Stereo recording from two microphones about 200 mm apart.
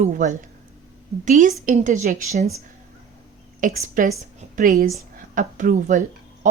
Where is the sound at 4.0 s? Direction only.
40° right (ahead or behind).